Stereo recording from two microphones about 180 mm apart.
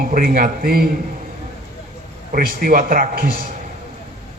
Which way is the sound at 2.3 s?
50° right (ahead or behind).